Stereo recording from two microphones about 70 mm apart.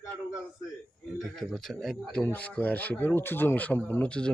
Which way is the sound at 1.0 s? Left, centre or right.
Centre.